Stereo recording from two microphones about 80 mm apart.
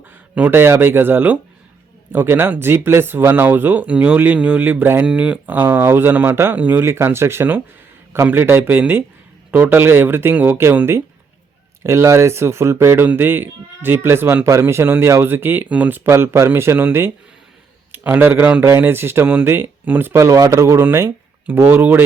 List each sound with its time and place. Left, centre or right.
0.5 s speech: right
20.8 s speech: right